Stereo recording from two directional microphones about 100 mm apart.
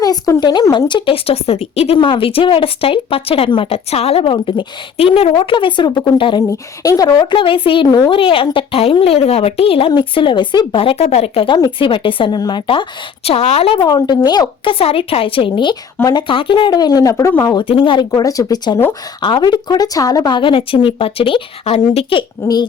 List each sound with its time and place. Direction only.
0.0 s a woman's voice: 40° left (ahead or behind); by 2.0 s 90° left
2.0 s speech: 65° left (ahead or behind)
6.5 s a woman's voice: 35° left (ahead or behind); by 7.9 s 60° left (ahead or behind)
7.9 s speech: 35° left (ahead or behind)
8.1 s a woman's voice: 65° left (ahead or behind)
9.9 s speech: 55° left (ahead or behind); by 11.4 s 90° left
11.4 s speech: 50° left (ahead or behind)
12.4 s speech: 45° left (ahead or behind); by 13.7 s 90° left
13.7 s a woman's voice: 45° left (ahead or behind)
17.6 s speech: 55° left (ahead or behind)
18.1 s a woman's voice: 35° left (ahead or behind); by 22.2 s 80° left
22.4 s speech: 25° left (ahead or behind)